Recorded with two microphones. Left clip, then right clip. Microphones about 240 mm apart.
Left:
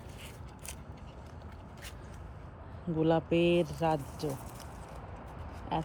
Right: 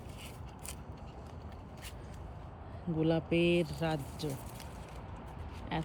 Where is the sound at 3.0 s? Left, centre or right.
Centre.